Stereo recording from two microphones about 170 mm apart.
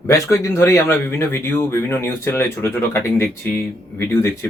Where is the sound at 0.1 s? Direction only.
15° left (ahead or behind).